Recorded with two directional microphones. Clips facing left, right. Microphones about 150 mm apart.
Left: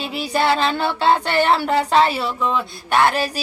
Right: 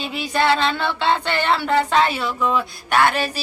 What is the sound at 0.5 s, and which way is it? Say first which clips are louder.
Speech: left 1 dB; 40° left (ahead or behind).